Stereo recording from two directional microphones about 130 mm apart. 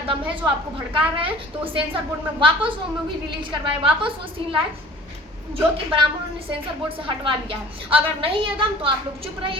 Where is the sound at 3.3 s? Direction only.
40° right (ahead or behind).